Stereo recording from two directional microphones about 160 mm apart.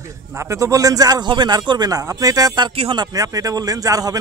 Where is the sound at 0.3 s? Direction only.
20° right (ahead or behind).